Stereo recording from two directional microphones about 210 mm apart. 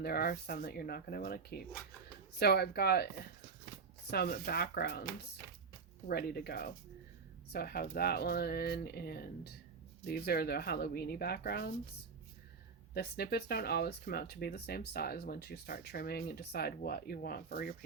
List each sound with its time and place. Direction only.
0.0 s speech: 50° left (ahead or behind)
4.1 s speech: 50° left (ahead or behind)
6.1 s speech: 50° left (ahead or behind)
12.9 s speech: 50° left (ahead or behind)